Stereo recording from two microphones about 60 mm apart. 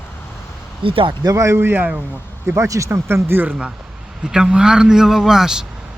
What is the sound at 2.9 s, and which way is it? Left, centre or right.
Speech, right.